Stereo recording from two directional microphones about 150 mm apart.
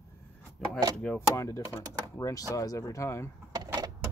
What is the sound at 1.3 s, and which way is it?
Speech, 20° left (ahead or behind).